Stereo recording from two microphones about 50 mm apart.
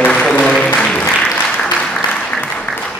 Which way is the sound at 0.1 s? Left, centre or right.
Centre.